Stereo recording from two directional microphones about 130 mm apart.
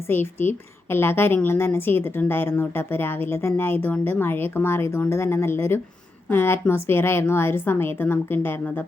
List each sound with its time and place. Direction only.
0.1 s a woman's voice: 15° left (ahead or behind)